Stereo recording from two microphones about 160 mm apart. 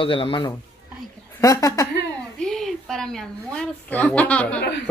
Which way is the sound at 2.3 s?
5° left (ahead or behind).